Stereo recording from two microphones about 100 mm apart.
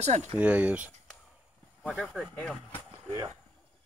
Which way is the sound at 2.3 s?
15° left (ahead or behind).